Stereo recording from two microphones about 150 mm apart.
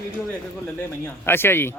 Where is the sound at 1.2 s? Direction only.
15° left (ahead or behind).